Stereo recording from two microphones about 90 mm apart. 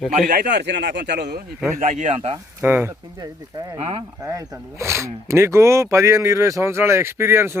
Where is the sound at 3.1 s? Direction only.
45° right (ahead or behind).